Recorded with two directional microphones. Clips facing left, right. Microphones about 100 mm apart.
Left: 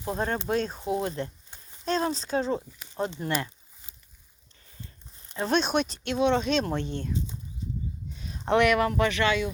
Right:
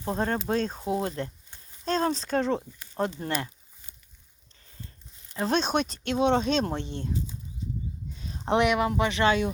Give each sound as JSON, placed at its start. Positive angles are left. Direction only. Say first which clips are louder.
{"t": 0.0, "sound": "speech", "louder": "right 1 dB", "side_deg": -35}
{"t": 2.7, "sound": "a sound", "louder": "left 1 dB", "side_deg": 20}
{"t": 5.4, "sound": "speech", "louder": "even", "side_deg": -35}
{"t": 8.2, "sound": "speech", "louder": "left 1 dB", "side_deg": -35}
{"t": 9.2, "sound": "speech", "louder": "right 6 dB", "side_deg": -40}